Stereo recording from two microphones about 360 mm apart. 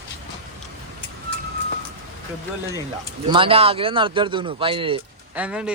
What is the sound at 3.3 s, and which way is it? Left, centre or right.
Speech, centre.